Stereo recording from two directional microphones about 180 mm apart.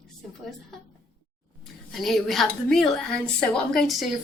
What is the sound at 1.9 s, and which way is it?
Speech, centre (ahead or behind).